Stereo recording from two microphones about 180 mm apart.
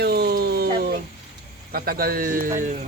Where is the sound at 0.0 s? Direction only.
65° right (ahead or behind).